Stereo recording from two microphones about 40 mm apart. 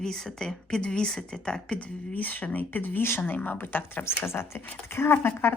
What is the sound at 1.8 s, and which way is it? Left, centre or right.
Speech, left.